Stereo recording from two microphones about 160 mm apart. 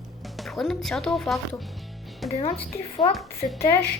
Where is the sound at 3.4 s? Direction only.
35° left (ahead or behind).